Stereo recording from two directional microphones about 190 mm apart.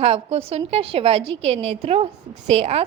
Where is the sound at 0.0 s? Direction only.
30° right (ahead or behind).